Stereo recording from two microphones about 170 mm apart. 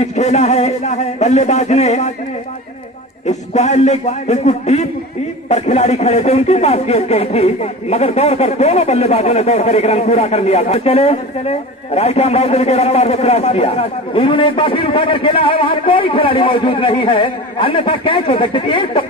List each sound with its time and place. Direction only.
0.0 s speech: 40° left (ahead or behind)
3.3 s speech: 40° left (ahead or behind)